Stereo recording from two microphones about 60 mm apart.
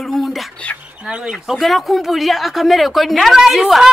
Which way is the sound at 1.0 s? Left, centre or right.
Centre.